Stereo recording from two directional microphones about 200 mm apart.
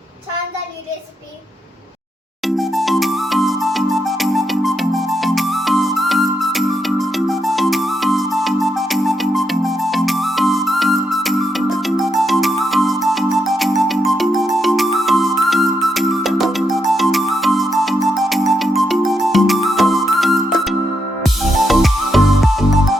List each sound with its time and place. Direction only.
2.5 s music: centre (ahead or behind)